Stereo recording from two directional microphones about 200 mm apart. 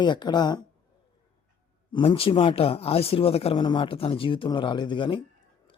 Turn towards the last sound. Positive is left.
turn(degrees=25)  # may be behind; listen again after turning